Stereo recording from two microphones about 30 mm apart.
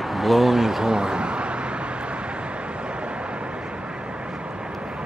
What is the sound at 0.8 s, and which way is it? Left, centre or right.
Speech, right.